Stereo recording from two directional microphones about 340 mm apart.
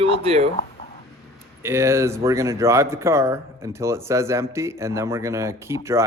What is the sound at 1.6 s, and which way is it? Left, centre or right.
Speech, centre.